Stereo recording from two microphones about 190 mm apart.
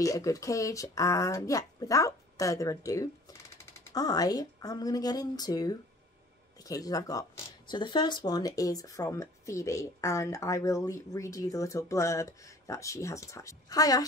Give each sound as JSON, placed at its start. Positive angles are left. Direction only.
{"t": 0.0, "sound": "speech", "side_deg": 15}